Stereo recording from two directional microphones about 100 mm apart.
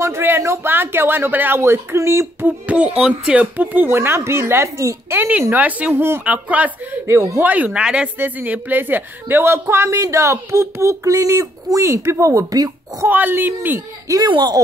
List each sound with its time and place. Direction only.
0.0 s speech: 25° right (ahead or behind)
2.6 s speech: 15° right (ahead or behind)
7.1 s speech: 30° right (ahead or behind)
7.4 s speech: 15° right (ahead or behind); by 13.1 s 35° right (ahead or behind)
13.1 s speech: 20° right (ahead or behind)
14.3 s speech: 45° right (ahead or behind)